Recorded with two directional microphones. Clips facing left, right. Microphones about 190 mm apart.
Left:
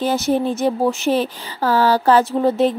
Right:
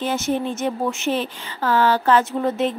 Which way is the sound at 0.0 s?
35° left (ahead or behind).